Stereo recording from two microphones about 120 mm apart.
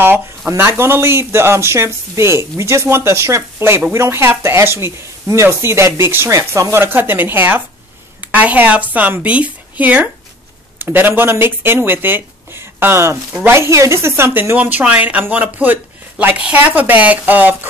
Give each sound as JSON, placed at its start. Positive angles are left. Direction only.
{"t": 0.5, "sound": "a woman's voice", "side_deg": -20}